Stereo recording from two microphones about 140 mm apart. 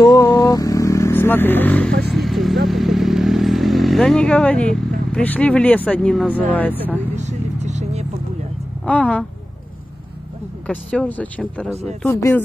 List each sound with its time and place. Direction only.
0.0 s vehicle: 25° left (ahead or behind)
2.1 s vehicle: centre (ahead or behind)
5.1 s speech: 10° left (ahead or behind)
7.2 s vehicle: 55° right (ahead or behind)
8.8 s speech: 10° left (ahead or behind)
10.7 s speech: 10° left (ahead or behind)
12.1 s speech: 20° left (ahead or behind)